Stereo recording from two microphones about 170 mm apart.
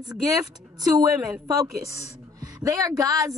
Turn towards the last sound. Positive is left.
turn(degrees=-20)  # may be behind; listen again after turning